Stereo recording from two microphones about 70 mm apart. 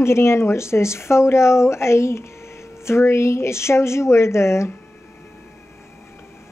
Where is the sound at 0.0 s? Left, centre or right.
Left.